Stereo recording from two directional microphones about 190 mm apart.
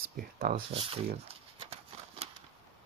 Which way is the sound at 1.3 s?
30° right (ahead or behind).